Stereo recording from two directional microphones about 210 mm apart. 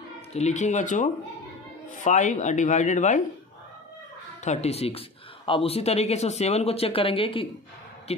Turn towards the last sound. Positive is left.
turn(degrees=25)  # may be behind; listen again after turning